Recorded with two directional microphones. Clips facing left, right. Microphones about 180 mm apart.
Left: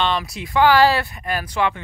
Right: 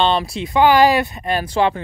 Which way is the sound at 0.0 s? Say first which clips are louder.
Right 5 dB; 30° right (ahead or behind).